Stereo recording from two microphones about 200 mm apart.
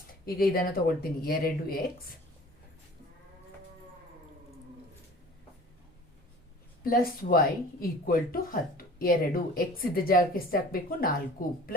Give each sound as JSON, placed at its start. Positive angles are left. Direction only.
{"t": 0.3, "sound": "speech", "side_deg": 45}
{"t": 6.8, "sound": "speech", "side_deg": 45}